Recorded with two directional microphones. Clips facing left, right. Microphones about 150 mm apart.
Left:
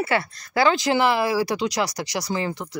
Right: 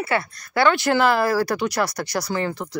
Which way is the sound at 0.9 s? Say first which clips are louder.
Right 1 dB; 10° left (ahead or behind).